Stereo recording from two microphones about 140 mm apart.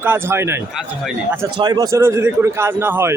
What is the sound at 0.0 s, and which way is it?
Speech, 15° right (ahead or behind).